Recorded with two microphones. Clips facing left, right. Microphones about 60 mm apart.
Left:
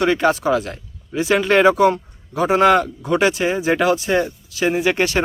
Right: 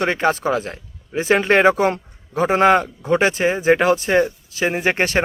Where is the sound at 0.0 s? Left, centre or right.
Right.